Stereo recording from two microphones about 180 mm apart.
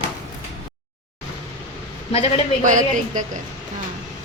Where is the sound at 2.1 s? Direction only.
35° left (ahead or behind).